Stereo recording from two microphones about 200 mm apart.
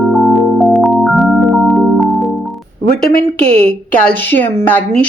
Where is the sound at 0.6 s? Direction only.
Centre (ahead or behind).